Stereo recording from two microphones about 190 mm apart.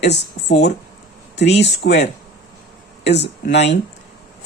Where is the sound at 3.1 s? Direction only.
65° left (ahead or behind).